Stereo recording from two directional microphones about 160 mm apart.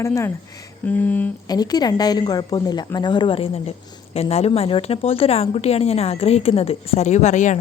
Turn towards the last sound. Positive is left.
turn(degrees=45)  # may be behind; listen again after turning